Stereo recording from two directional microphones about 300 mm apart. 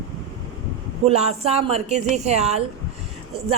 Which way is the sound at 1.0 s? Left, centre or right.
Right.